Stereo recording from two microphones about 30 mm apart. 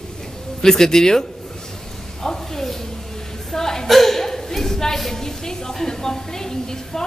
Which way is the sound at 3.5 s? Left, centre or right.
Centre.